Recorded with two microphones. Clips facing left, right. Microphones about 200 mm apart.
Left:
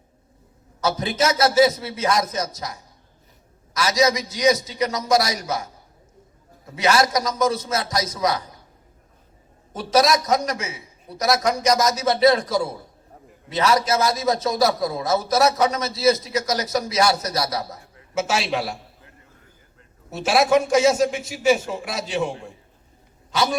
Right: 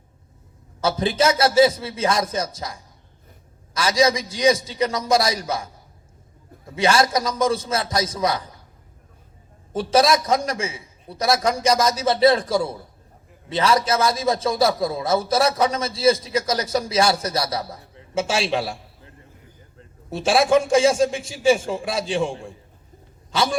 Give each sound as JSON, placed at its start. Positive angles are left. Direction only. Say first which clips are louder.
{"t": 0.8, "sound": "a man's voice", "louder": "right 2 dB", "side_deg": -30}
{"t": 3.8, "sound": "a man's voice", "louder": "right 1 dB", "side_deg": -30}
{"t": 6.7, "sound": "a man's voice", "louder": "right 1 dB", "side_deg": -30}
{"t": 9.7, "sound": "a man's voice", "louder": "right 1 dB", "side_deg": -30}